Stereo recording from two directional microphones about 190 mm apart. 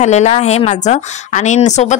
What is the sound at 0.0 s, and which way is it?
A woman's voice, 35° left (ahead or behind).